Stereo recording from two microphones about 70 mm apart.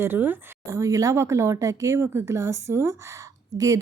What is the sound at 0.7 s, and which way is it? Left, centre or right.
Speech, right.